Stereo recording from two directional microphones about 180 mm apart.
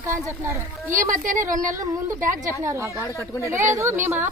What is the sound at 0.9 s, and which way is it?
Speech, 45° right (ahead or behind).